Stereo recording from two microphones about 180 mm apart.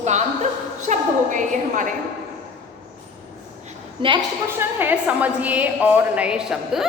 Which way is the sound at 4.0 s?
30° right (ahead or behind).